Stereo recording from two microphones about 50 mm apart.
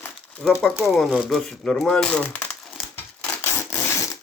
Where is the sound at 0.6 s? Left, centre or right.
Centre; by 2.2 s left.